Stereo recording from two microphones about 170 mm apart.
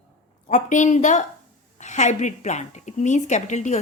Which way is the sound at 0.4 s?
45° left (ahead or behind).